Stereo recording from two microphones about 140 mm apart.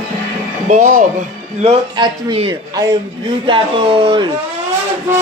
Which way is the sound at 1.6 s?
45° right (ahead or behind).